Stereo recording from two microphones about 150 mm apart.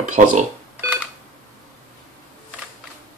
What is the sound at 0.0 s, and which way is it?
Speech, 55° right (ahead or behind).